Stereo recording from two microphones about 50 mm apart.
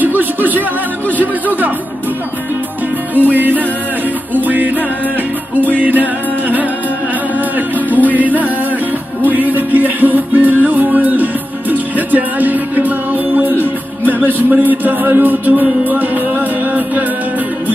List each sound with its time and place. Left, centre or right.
0.0 s music: right
3.2 s music: right
5.8 s music: right
7.3 s music: right
14.0 s speech: right
15.6 s music: right